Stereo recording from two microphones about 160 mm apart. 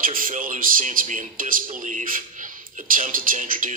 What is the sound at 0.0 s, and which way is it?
A man's voice, 60° right (ahead or behind).